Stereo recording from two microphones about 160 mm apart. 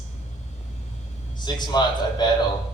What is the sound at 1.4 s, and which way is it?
Speech, 25° left (ahead or behind).